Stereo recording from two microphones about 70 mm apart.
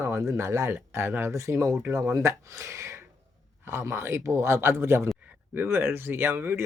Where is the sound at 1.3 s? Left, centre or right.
Right.